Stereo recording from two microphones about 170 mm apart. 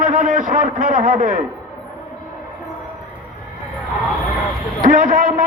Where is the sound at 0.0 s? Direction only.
50° right (ahead or behind).